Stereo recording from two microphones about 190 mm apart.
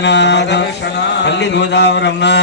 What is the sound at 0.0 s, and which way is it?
Mantra, 70° left (ahead or behind).